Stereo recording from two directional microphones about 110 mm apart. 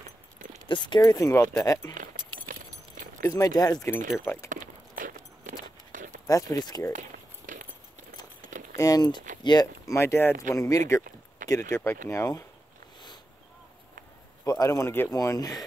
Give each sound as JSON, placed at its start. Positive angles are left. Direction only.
{"t": 0.7, "sound": "speech", "side_deg": 45}
{"t": 3.2, "sound": "speech", "side_deg": 30}
{"t": 6.2, "sound": "speech", "side_deg": 30}
{"t": 8.7, "sound": "speech", "side_deg": 35}
{"t": 9.8, "sound": "speech", "side_deg": 25}
{"t": 14.4, "sound": "speech", "side_deg": 30}
{"t": 15.1, "sound": "speech", "side_deg": 35}